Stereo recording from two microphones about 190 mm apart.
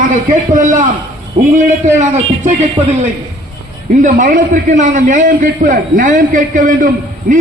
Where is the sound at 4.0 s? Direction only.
40° right (ahead or behind).